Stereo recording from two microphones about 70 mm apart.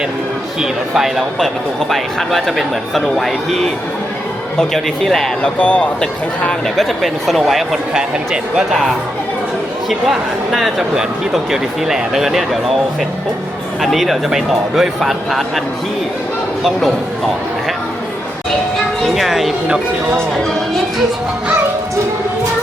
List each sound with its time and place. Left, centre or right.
0.6 s speech: centre
5.5 s speech: centre
9.9 s speech: centre
13.8 s speech: centre
19.0 s speech: centre